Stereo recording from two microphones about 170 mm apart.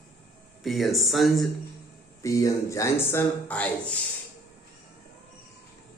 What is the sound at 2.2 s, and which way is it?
Speech, 20° left (ahead or behind).